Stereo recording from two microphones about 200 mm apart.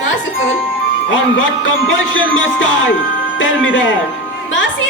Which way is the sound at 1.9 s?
75° left (ahead or behind).